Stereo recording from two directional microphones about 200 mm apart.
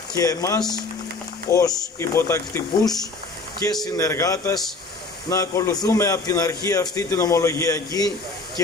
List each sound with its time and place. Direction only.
0.1 s a man's voice: 15° left (ahead or behind)